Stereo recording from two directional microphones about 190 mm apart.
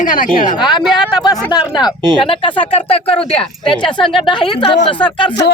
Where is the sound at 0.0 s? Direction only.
45° left (ahead or behind).